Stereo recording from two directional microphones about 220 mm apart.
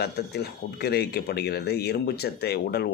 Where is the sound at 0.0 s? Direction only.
45° left (ahead or behind).